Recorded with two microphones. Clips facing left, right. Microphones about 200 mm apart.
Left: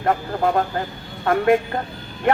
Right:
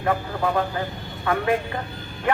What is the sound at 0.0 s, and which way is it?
A man's voice, 50° left (ahead or behind).